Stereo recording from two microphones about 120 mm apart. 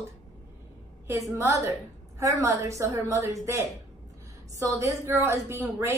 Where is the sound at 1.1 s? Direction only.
25° right (ahead or behind).